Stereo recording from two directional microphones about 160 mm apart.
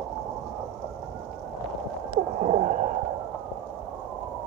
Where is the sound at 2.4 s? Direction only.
50° right (ahead or behind).